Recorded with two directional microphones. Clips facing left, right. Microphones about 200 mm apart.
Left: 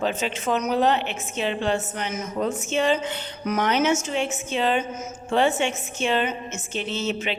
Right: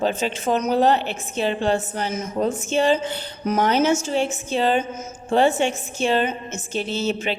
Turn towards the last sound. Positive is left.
turn(degrees=-35)  # may be behind; listen again after turning